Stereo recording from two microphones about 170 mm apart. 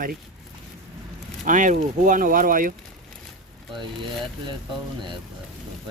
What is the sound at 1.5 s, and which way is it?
Speech, 50° right (ahead or behind).